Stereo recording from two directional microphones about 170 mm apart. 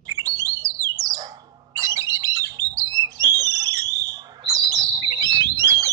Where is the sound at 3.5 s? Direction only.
20° right (ahead or behind).